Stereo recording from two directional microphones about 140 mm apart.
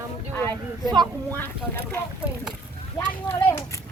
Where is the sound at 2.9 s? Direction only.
15° left (ahead or behind).